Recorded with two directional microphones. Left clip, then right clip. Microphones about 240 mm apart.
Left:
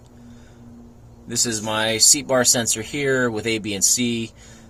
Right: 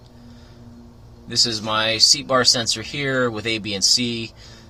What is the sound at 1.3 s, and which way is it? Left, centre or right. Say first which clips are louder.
Speech: right 3 dB; centre.